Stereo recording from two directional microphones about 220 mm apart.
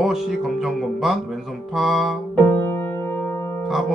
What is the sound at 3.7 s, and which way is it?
Speech, centre (ahead or behind).